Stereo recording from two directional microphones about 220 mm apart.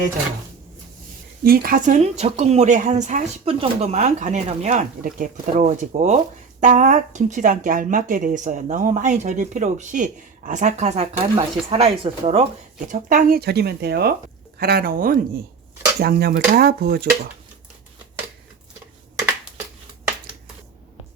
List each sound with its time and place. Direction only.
1.5 s speech: 40° right (ahead or behind)
12.9 s speech: 40° right (ahead or behind)